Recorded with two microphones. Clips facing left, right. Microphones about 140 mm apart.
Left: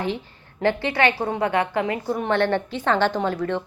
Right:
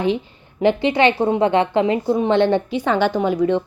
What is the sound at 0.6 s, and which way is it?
A woman's voice, 20° right (ahead or behind).